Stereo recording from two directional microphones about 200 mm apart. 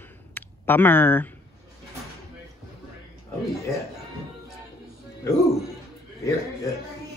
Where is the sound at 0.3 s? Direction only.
10° left (ahead or behind).